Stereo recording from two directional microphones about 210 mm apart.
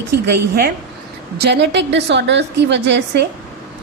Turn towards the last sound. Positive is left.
turn(degrees=-55)  # may be behind; listen again after turning